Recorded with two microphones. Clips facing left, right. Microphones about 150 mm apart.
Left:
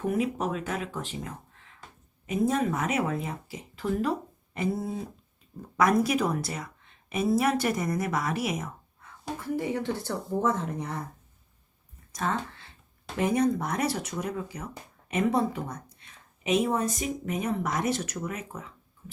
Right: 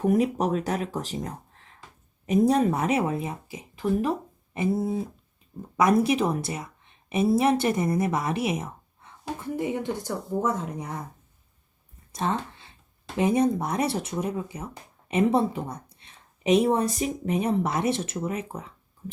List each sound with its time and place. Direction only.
0.0 s a woman's voice: 40° right (ahead or behind); by 11.0 s 10° right (ahead or behind)
12.1 s a sound: 20° right (ahead or behind)
13.1 s a woman's voice: 20° right (ahead or behind)